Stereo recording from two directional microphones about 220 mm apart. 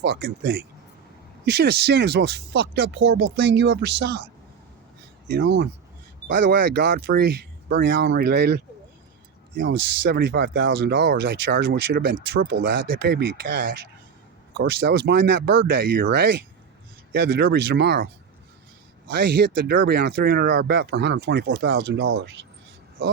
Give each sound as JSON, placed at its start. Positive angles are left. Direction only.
{"t": 0.0, "sound": "speech", "side_deg": -50}
{"t": 5.3, "sound": "speech", "side_deg": -45}